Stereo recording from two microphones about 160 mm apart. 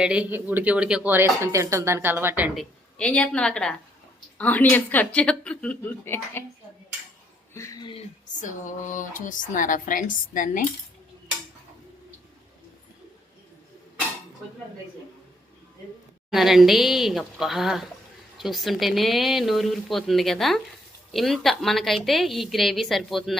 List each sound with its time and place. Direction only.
0.0 s speech: 5° right (ahead or behind)
2.6 s a woman's voice: 5° left (ahead or behind)
7.5 s speech: 20° left (ahead or behind)
8.4 s speech: 50° left (ahead or behind)
16.3 s a woman's voice: centre (ahead or behind)